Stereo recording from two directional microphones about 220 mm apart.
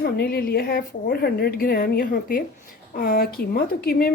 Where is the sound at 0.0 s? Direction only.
45° left (ahead or behind).